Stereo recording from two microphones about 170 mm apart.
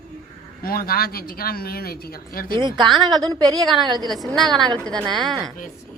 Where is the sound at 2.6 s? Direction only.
25° right (ahead or behind).